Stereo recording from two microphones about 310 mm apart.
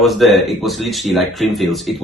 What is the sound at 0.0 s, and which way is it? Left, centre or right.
Speech, centre.